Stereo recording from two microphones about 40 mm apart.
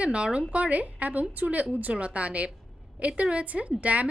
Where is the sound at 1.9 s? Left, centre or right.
Right.